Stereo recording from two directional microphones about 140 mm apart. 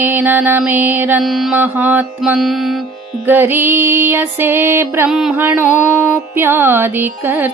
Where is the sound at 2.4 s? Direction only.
Centre (ahead or behind).